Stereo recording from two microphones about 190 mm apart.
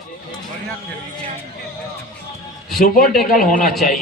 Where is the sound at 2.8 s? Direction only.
50° left (ahead or behind).